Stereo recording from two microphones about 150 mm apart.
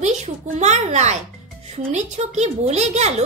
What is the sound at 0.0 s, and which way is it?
A child's voice, 50° right (ahead or behind).